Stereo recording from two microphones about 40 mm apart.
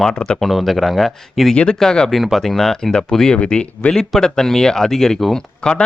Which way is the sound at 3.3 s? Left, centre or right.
Left.